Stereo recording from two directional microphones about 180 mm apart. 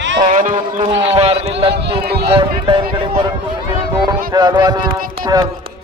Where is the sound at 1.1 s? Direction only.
35° right (ahead or behind).